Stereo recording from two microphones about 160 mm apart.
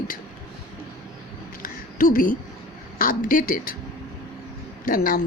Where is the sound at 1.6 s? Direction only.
60° left (ahead or behind).